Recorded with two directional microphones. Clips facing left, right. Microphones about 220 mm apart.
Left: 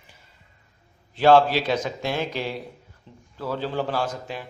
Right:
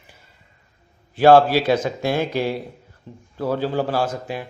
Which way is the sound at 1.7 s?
50° right (ahead or behind).